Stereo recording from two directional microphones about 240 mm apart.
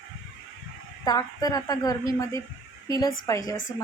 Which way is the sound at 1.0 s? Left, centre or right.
Centre.